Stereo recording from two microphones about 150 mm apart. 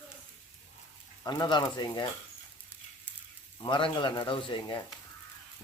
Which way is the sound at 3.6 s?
30° left (ahead or behind).